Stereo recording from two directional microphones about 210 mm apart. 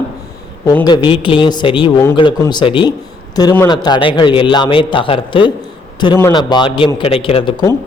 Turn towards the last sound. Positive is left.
turn(degrees=20)  # may be behind; listen again after turning